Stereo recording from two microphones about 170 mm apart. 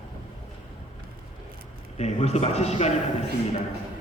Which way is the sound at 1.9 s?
40° left (ahead or behind).